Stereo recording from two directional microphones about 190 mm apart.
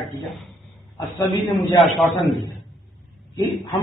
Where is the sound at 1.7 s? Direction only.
Centre (ahead or behind).